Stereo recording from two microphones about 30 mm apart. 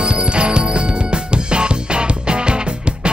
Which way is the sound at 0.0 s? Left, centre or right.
Right.